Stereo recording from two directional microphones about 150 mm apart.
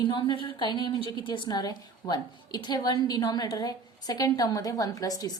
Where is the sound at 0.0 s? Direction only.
30° left (ahead or behind).